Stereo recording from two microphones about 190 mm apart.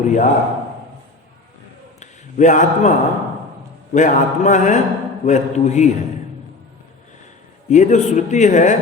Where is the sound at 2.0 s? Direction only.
40° left (ahead or behind).